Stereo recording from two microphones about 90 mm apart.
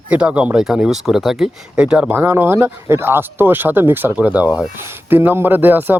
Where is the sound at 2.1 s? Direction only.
25° right (ahead or behind).